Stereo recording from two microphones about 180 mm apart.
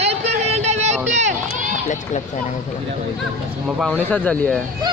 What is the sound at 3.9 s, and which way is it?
Speech, 10° left (ahead or behind).